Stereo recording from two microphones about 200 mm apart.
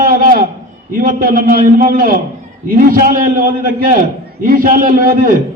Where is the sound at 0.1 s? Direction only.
45° right (ahead or behind).